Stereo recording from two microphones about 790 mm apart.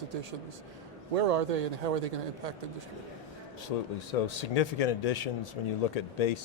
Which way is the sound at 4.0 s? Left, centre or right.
Left.